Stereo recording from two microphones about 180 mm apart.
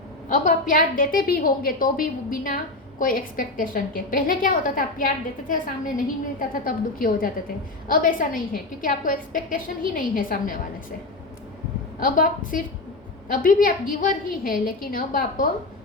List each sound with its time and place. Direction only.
0.3 s a woman's voice: 45° left (ahead or behind)
11.9 s a woman's voice: 50° left (ahead or behind)